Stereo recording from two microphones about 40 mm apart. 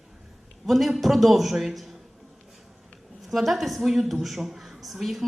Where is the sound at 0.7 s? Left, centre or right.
Centre.